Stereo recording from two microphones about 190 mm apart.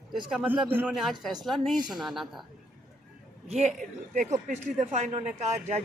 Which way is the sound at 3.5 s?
35° right (ahead or behind).